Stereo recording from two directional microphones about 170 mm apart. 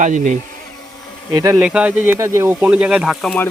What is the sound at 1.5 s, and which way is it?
Speech, 5° right (ahead or behind).